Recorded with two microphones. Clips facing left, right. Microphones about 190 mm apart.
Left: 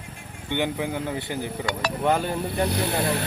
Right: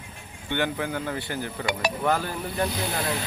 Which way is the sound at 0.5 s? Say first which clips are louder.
Left 1 dB; 15° left (ahead or behind).